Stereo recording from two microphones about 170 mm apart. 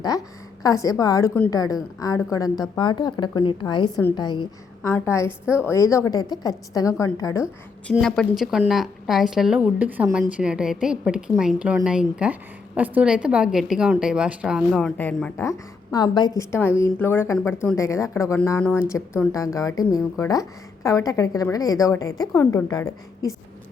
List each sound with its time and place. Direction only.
0.6 s a woman's voice: 20° left (ahead or behind)
4.9 s a woman's voice: 15° left (ahead or behind)
7.9 s a woman's voice: 5° left (ahead or behind)